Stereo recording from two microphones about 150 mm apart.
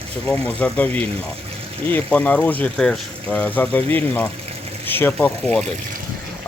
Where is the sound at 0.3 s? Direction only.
10° left (ahead or behind).